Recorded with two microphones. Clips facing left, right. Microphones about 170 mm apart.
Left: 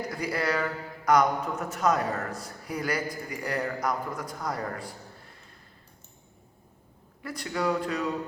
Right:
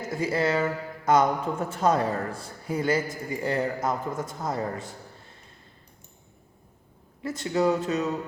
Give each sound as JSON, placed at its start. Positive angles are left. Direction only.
{"t": 0.0, "sound": "a man's voice", "side_deg": -25}
{"t": 7.2, "sound": "a man's voice", "side_deg": -25}